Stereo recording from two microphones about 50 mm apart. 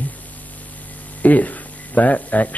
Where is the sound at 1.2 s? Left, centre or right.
Left.